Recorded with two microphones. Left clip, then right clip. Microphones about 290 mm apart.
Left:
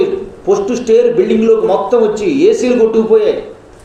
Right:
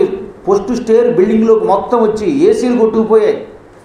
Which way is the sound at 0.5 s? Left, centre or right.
Centre.